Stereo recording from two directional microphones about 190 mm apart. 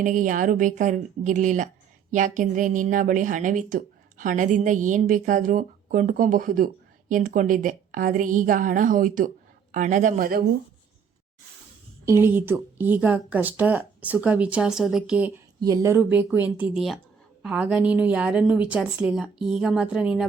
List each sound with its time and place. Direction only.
0.0 s a woman's voice: 45° right (ahead or behind)
12.0 s speech: 10° right (ahead or behind)
15.6 s a woman's voice: 15° right (ahead or behind)